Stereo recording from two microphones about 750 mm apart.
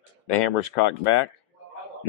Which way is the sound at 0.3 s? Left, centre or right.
Left.